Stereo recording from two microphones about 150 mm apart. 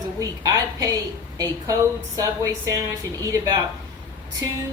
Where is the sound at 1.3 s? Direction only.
20° right (ahead or behind).